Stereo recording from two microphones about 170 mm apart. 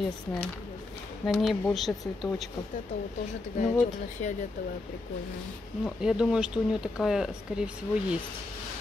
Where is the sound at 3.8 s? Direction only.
45° left (ahead or behind).